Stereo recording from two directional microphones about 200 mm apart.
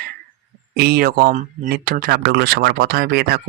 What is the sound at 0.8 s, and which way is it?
Speech, 50° right (ahead or behind).